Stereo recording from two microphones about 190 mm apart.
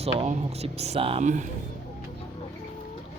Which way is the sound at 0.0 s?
35° right (ahead or behind).